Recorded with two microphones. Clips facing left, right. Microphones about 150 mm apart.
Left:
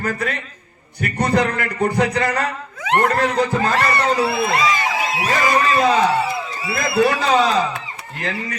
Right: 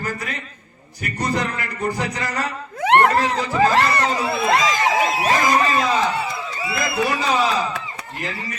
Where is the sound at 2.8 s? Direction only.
65° right (ahead or behind).